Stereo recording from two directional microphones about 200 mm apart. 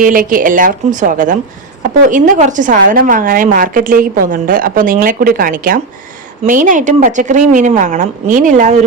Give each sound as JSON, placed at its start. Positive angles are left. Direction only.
{"t": 0.0, "sound": "a woman's voice", "side_deg": -40}